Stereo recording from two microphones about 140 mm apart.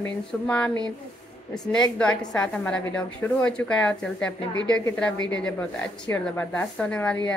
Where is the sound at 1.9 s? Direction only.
5° left (ahead or behind).